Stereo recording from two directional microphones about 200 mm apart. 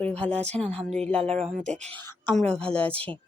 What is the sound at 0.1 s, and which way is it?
Speech, 5° left (ahead or behind).